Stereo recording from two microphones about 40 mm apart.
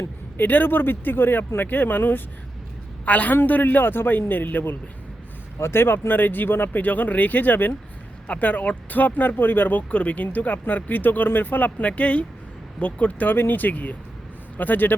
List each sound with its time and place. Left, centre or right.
0.3 s speech: left
3.1 s speech: left
5.6 s speech: left
8.3 s speech: left
9.9 s speech: left
13.3 s speech: left